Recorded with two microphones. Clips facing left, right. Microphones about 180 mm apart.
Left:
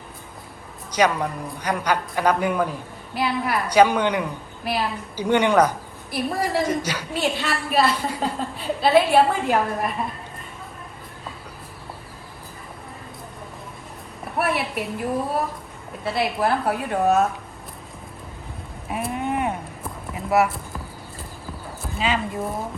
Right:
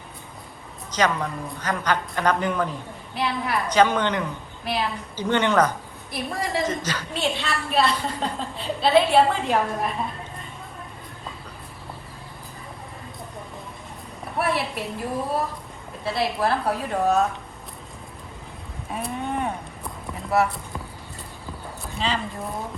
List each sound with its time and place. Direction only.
0.9 s a man's voice: 10° left (ahead or behind)
14.3 s a woman's voice: centre (ahead or behind)
18.9 s a sound: 5° left (ahead or behind)
20.3 s speech: centre (ahead or behind)
21.9 s a woman's voice: centre (ahead or behind)